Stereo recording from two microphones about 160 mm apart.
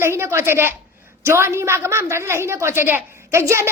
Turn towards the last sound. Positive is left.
turn(degrees=-15)  # may be behind; listen again after turning